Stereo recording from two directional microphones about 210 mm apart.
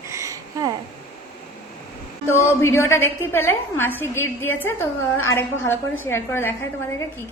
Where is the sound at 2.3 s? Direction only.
10° left (ahead or behind).